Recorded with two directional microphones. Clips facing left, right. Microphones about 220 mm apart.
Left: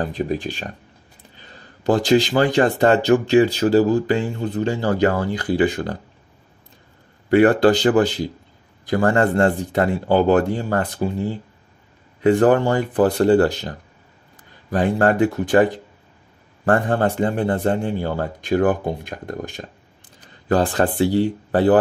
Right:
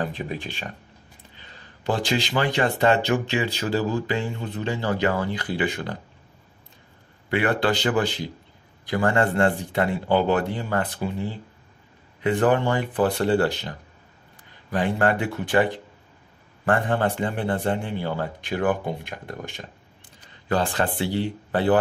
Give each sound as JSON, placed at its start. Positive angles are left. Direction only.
{"t": 0.0, "sound": "a man's voice", "side_deg": 40}
{"t": 1.9, "sound": "speech", "side_deg": 40}
{"t": 7.2, "sound": "a man's voice", "side_deg": 45}